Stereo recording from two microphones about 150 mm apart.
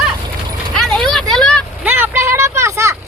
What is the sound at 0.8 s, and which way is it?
Vehicle, centre (ahead or behind).